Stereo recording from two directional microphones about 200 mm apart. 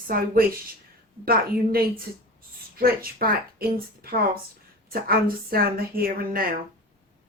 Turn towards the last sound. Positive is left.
turn(degrees=-45)  # may be behind; listen again after turning